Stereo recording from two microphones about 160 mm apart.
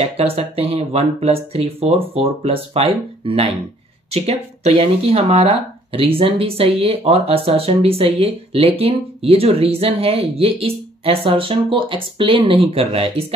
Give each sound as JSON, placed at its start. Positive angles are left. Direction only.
{"t": 0.0, "sound": "speech", "side_deg": -35}